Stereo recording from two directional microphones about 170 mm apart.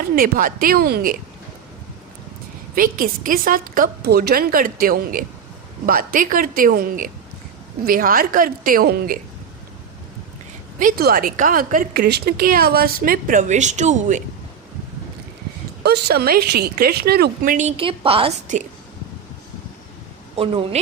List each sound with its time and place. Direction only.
0.0 s a woman's voice: 60° right (ahead or behind)
2.7 s a woman's voice: 55° right (ahead or behind)
10.8 s a woman's voice: 60° right (ahead or behind)
15.8 s a woman's voice: 75° right (ahead or behind); by 18.3 s 35° right (ahead or behind)
20.3 s speech: 30° right (ahead or behind)